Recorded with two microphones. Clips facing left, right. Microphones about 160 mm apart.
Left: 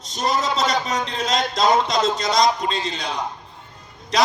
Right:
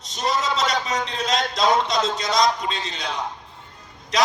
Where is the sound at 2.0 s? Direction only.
35° left (ahead or behind).